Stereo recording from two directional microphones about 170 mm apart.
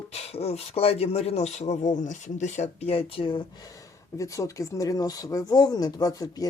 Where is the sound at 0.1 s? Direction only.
35° left (ahead or behind).